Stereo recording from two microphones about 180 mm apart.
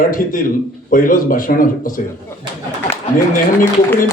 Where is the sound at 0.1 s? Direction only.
50° left (ahead or behind).